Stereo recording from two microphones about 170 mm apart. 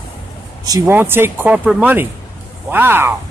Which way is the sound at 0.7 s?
15° right (ahead or behind).